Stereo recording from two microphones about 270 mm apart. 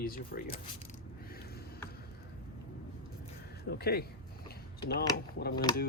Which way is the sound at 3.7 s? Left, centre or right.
Left.